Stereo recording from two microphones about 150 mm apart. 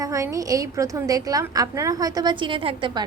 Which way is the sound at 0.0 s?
20° right (ahead or behind).